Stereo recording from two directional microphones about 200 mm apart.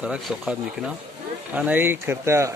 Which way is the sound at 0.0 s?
5° right (ahead or behind).